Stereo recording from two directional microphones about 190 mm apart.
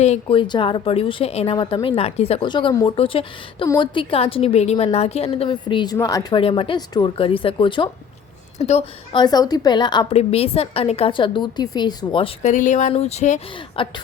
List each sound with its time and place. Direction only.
0.0 s a woman's voice: 30° left (ahead or behind)
8.5 s a woman's voice: 35° left (ahead or behind)
9.1 s a woman's voice: 20° left (ahead or behind)